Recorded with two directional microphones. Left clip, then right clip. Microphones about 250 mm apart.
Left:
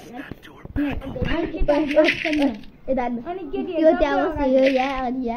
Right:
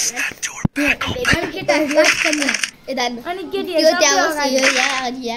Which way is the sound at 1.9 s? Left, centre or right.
Centre.